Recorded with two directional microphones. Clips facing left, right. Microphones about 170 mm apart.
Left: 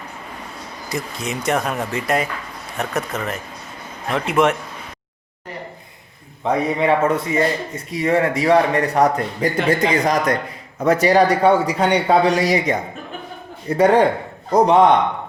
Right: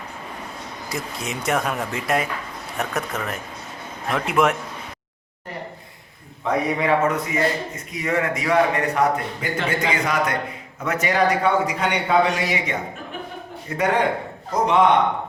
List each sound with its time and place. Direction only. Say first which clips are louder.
0.9 s speech: left 4 dB; centre (ahead or behind)
6.4 s speech: left 3 dB; 25° left (ahead or behind)